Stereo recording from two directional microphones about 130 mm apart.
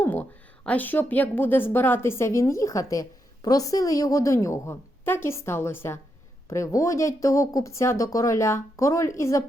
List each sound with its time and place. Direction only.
0.0 s a woman's voice: 15° left (ahead or behind)